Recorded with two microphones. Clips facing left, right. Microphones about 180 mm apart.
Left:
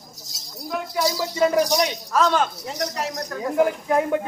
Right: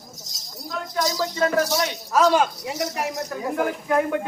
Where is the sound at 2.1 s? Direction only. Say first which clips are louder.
Right 2 dB; 10° right (ahead or behind).